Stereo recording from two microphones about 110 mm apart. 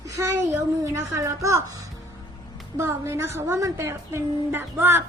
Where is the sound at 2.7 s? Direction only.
25° right (ahead or behind).